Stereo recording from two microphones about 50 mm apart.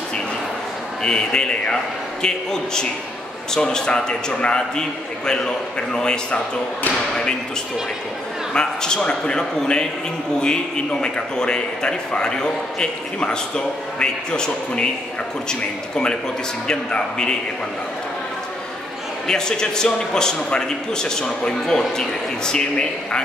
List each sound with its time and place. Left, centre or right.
1.0 s a man's voice: centre
8.5 s a man's voice: centre
16.6 s a man's voice: centre
19.2 s a man's voice: centre